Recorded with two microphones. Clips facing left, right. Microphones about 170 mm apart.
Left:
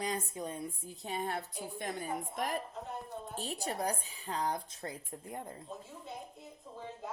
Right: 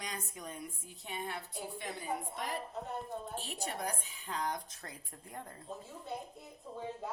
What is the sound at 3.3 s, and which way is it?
A woman's voice, 40° left (ahead or behind).